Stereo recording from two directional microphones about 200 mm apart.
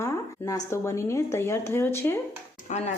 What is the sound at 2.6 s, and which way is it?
Speech, 35° left (ahead or behind).